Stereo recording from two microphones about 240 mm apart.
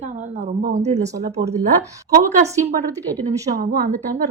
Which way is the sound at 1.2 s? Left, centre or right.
Right.